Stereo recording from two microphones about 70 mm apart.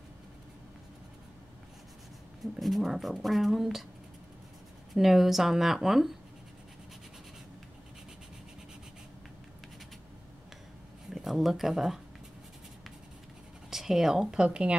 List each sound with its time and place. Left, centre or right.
2.4 s speech: centre
4.9 s speech: centre
11.1 s speech: centre
13.7 s speech: centre